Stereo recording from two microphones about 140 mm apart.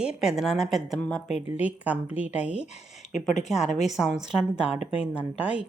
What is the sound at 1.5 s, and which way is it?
Speech, 10° right (ahead or behind).